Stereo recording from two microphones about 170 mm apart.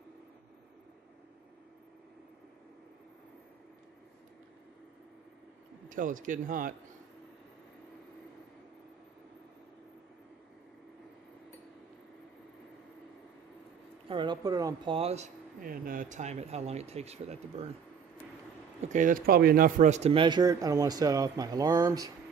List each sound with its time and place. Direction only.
5.9 s speech: 50° right (ahead or behind)
14.0 s speech: 30° right (ahead or behind)
18.8 s speech: 45° right (ahead or behind); by 22.1 s 20° right (ahead or behind)